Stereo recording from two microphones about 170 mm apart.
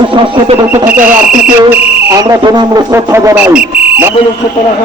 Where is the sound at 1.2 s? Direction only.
5° right (ahead or behind).